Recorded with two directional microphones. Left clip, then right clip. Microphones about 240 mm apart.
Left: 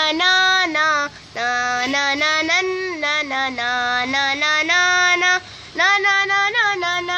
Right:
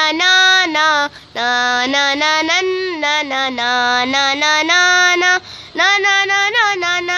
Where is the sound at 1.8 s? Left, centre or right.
Right.